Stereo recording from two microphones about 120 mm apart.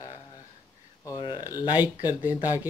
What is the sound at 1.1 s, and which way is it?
Speech, 40° left (ahead or behind).